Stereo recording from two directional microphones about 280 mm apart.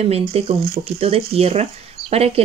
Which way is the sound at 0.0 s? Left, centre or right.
Right.